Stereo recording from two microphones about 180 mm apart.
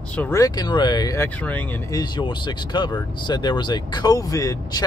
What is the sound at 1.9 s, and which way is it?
Speech, 25° left (ahead or behind).